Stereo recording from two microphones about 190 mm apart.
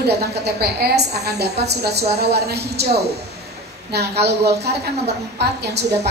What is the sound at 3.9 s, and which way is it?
Speech, 60° right (ahead or behind).